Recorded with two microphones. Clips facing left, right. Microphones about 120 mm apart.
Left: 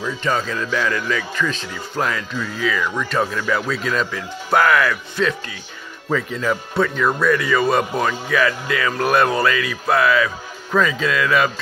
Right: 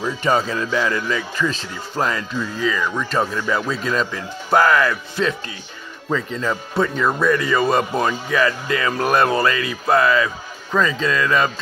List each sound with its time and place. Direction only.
0.4 s speech: 30° right (ahead or behind)
0.7 s speech: 15° right (ahead or behind); by 11.5 s 5° left (ahead or behind)